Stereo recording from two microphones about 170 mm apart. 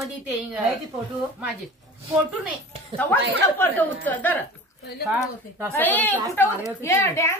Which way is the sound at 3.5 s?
10° left (ahead or behind).